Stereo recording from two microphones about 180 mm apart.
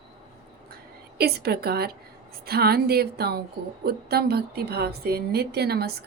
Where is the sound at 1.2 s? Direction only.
60° right (ahead or behind).